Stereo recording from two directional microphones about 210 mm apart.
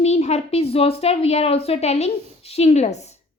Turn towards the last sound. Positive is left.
turn(degrees=30)  # may be behind; listen again after turning